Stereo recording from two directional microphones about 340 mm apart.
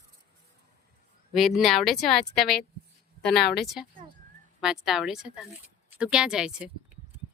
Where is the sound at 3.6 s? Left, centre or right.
Centre.